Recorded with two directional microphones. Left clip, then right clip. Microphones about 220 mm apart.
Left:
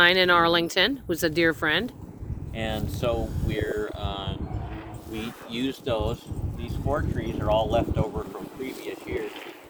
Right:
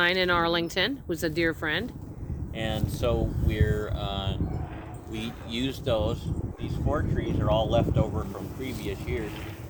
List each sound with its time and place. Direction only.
0.0 s speech: 15° left (ahead or behind)
2.6 s speech: 25° right (ahead or behind)
6.7 s speech: 15° right (ahead or behind)